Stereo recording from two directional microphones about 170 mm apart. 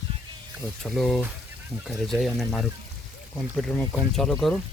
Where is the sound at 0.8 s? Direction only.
5° left (ahead or behind).